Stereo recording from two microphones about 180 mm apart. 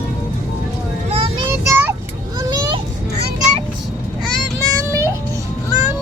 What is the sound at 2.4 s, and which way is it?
Children playing, 20° right (ahead or behind).